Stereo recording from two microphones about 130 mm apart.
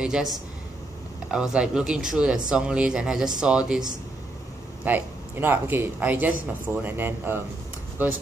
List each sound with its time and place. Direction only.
0.0 s speech: 5° right (ahead or behind)
1.3 s speech: 5° right (ahead or behind)
4.8 s speech: 15° right (ahead or behind)